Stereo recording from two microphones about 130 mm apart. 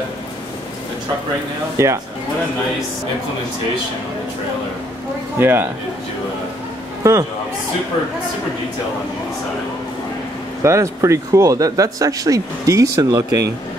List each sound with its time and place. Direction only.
1.8 s speech: 20° right (ahead or behind)
5.4 s speech: 15° right (ahead or behind)
7.0 s speech: 25° right (ahead or behind)
10.6 s speech: 25° right (ahead or behind)